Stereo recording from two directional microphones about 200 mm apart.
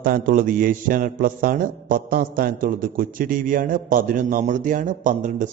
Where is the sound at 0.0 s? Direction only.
45° right (ahead or behind).